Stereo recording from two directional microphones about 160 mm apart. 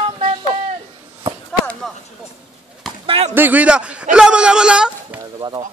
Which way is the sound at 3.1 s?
40° right (ahead or behind).